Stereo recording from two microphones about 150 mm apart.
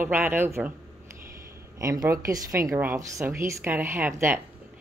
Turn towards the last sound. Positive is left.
turn(degrees=-15)  # may be behind; listen again after turning